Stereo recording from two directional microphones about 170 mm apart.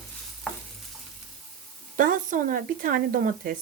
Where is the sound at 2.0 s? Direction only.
50° right (ahead or behind).